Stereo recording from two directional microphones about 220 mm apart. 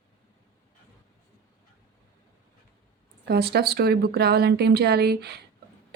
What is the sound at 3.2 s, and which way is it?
Speech, 45° right (ahead or behind).